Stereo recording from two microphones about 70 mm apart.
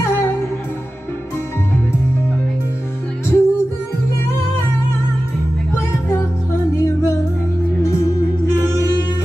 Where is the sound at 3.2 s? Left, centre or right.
Left.